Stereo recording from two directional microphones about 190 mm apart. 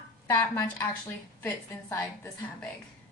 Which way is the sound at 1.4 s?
10° left (ahead or behind).